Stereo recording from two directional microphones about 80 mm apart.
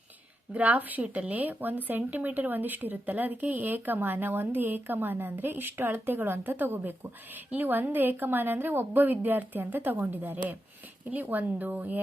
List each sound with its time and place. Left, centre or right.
0.5 s a woman's voice: centre